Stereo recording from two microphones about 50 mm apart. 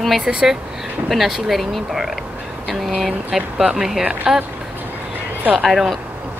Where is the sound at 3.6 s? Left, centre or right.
Centre.